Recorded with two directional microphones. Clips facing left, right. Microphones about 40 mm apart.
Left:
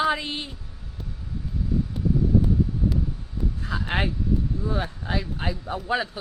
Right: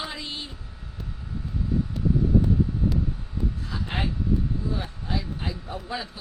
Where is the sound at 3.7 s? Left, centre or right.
Left.